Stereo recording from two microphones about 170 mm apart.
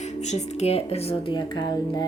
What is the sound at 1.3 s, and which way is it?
Speech, 25° left (ahead or behind).